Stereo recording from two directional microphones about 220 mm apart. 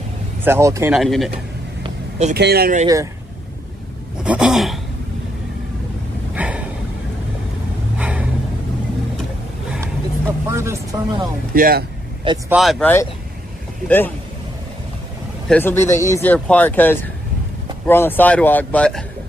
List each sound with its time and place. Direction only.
0.4 s speech: 10° right (ahead or behind)
0.9 s speech: centre (ahead or behind)
1.8 s vehicle: 30° right (ahead or behind)
2.3 s speech: 45° right (ahead or behind)
4.2 s speech: 5° right (ahead or behind)
6.3 s a sound: 5° right (ahead or behind)
8.0 s gasp: 5° right (ahead or behind)
9.7 s vehicle: 10° right (ahead or behind)
11.5 s speech: 40° right (ahead or behind)
12.4 s speech: centre (ahead or behind)
15.4 s speech: 5° left (ahead or behind)